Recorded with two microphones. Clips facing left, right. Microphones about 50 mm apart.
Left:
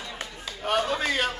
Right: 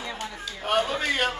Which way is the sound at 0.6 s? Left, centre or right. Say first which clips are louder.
Right 1 dB; centre.